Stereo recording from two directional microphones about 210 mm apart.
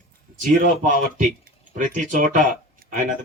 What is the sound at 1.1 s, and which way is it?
Speech, 35° right (ahead or behind).